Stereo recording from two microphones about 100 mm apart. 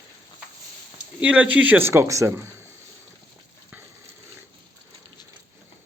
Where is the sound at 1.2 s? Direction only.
15° right (ahead or behind); by 2.4 s 30° right (ahead or behind).